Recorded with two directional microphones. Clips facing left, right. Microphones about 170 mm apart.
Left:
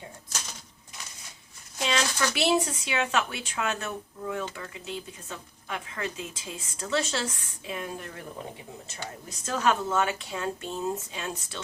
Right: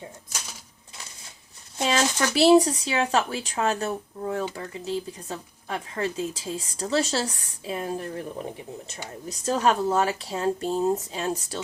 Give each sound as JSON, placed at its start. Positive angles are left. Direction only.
{"t": 1.8, "sound": "a sound", "side_deg": -40}
{"t": 2.0, "sound": "speech", "side_deg": -20}
{"t": 2.3, "sound": "speech", "side_deg": -35}
{"t": 9.5, "sound": "speech", "side_deg": -35}